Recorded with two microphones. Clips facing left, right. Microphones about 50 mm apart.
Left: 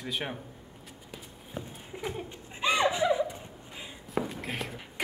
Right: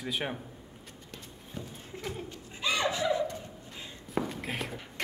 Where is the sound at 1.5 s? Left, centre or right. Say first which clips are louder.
Left 2 dB; centre.